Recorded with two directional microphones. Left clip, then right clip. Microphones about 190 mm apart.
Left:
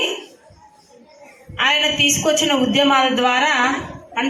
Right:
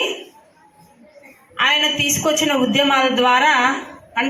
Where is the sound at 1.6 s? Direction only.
15° right (ahead or behind).